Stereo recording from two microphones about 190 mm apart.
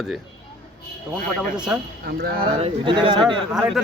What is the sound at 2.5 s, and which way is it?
Speech, 30° right (ahead or behind).